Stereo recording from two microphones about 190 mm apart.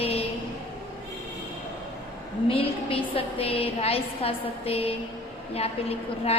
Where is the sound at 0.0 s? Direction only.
30° left (ahead or behind).